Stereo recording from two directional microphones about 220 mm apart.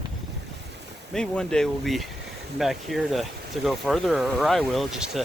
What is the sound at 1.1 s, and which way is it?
Speech, 5° left (ahead or behind).